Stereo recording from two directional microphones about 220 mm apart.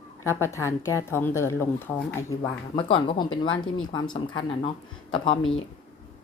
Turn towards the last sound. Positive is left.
turn(degrees=20)  # may be behind; listen again after turning